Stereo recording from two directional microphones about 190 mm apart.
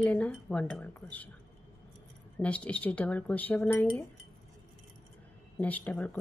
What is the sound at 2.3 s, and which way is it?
A woman's voice, 5° left (ahead or behind).